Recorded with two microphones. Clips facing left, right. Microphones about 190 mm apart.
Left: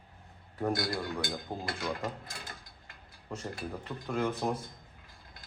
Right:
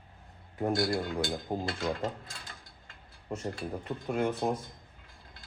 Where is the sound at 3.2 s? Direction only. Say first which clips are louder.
Right 3 dB; 25° right (ahead or behind).